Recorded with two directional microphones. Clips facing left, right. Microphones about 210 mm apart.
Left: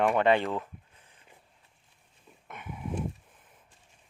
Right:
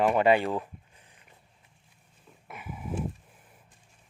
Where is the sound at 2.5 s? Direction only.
5° right (ahead or behind).